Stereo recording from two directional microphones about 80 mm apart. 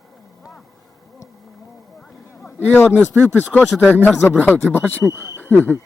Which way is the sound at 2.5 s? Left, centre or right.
Left.